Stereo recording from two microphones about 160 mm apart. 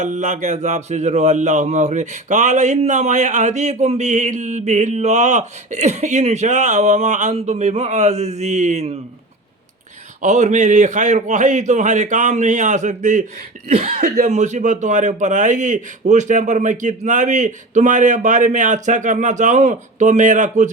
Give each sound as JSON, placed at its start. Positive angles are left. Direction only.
{"t": 0.0, "sound": "speech", "side_deg": -50}
{"t": 10.2, "sound": "speech", "side_deg": -50}